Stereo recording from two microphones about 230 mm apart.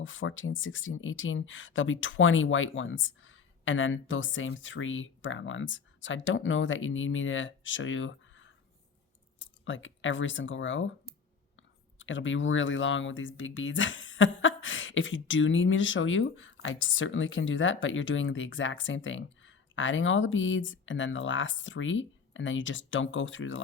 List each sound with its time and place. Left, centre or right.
0.0 s speech: left
11.9 s speech: left